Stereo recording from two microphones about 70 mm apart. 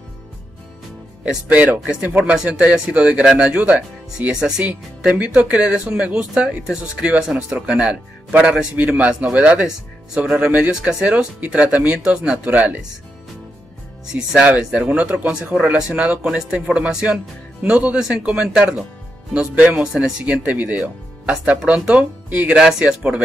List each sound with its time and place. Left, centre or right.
1.5 s speech: right
4.3 s speech: centre
14.1 s speech: centre